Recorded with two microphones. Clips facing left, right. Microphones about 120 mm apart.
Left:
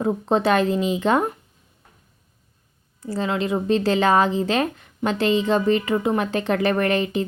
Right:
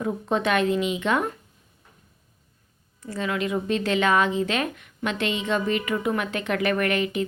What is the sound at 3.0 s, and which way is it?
A woman's voice, 30° left (ahead or behind).